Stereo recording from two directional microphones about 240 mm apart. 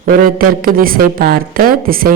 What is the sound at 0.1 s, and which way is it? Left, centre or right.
A woman's voice, right.